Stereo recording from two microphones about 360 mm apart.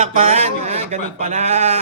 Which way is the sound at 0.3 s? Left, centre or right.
Centre.